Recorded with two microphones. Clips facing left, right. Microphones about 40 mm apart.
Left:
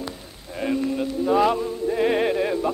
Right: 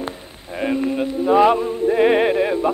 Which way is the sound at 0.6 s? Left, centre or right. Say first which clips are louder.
Right 3 dB; right.